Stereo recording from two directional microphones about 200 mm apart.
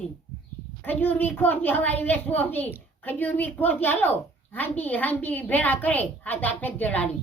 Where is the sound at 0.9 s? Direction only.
10° left (ahead or behind).